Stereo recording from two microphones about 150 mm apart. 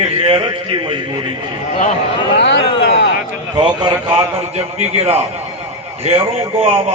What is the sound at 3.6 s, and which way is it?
A man's voice, 35° right (ahead or behind).